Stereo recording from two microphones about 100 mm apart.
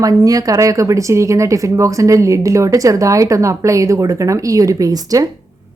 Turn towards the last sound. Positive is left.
turn(degrees=-35)  # may be behind; listen again after turning